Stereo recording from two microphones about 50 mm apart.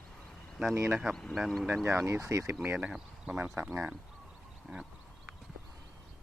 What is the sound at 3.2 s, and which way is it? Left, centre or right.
Speech, right.